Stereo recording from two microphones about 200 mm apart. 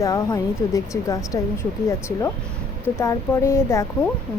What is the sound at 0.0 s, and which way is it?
A woman's voice, 15° left (ahead or behind).